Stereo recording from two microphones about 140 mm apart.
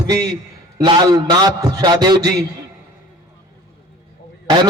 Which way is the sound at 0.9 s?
30° right (ahead or behind).